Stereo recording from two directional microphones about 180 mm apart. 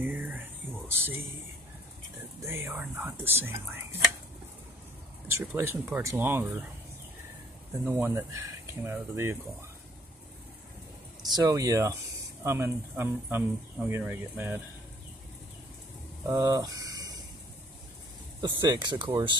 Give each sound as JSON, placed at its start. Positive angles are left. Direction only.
{"t": 0.0, "sound": "a sound", "side_deg": -10}
{"t": 0.8, "sound": "speech", "side_deg": -10}
{"t": 2.4, "sound": "speech", "side_deg": -10}
{"t": 5.3, "sound": "speech", "side_deg": -15}
{"t": 7.8, "sound": "speech", "side_deg": -15}
{"t": 11.2, "sound": "speech", "side_deg": -20}
{"t": 16.3, "sound": "speech", "side_deg": -20}
{"t": 18.4, "sound": "speech", "side_deg": -25}